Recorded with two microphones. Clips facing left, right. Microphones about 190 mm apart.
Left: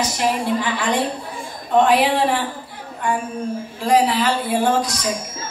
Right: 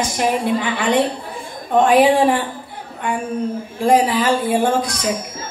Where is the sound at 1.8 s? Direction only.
50° right (ahead or behind).